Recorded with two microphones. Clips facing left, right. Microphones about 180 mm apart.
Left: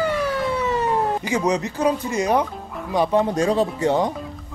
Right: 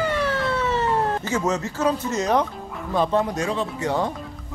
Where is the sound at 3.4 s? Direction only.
35° left (ahead or behind).